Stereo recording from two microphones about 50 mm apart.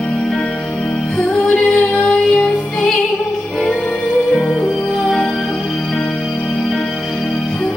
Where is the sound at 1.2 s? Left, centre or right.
Centre.